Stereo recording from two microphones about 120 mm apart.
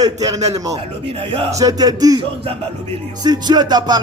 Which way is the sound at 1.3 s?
50° right (ahead or behind).